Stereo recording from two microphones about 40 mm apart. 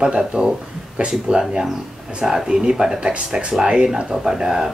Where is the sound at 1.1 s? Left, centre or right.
Centre.